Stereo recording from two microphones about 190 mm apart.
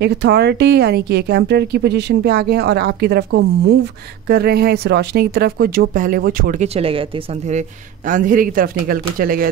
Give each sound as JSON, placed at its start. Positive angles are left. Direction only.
{"t": 0.0, "sound": "speech", "side_deg": -65}
{"t": 6.7, "sound": "speech", "side_deg": -30}
{"t": 8.1, "sound": "speech", "side_deg": -45}